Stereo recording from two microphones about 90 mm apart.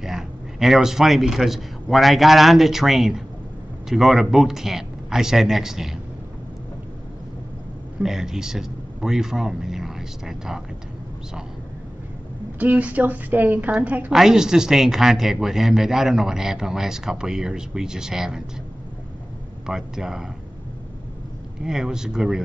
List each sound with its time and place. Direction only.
0.0 s a man's voice: 5° right (ahead or behind)
8.0 s speech: 5° right (ahead or behind)
12.5 s a woman's voice: 15° right (ahead or behind)
14.1 s speech: 5° right (ahead or behind)
19.6 s speech: 5° right (ahead or behind)
21.6 s speech: 5° right (ahead or behind)